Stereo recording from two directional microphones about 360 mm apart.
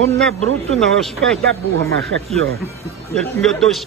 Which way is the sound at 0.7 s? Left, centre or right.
Centre.